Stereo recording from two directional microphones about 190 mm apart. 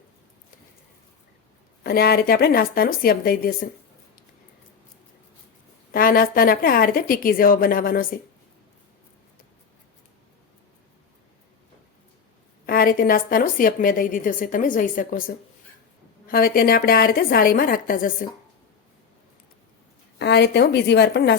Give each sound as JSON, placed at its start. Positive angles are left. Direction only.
{"t": 1.8, "sound": "a woman's voice", "side_deg": 55}
{"t": 5.9, "sound": "a woman's voice", "side_deg": 50}
{"t": 12.6, "sound": "a woman's voice", "side_deg": 50}
{"t": 16.2, "sound": "a woman's voice", "side_deg": 50}
{"t": 20.1, "sound": "a woman's voice", "side_deg": 60}